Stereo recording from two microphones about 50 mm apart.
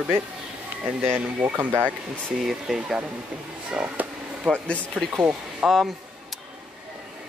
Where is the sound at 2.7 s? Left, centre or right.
Centre.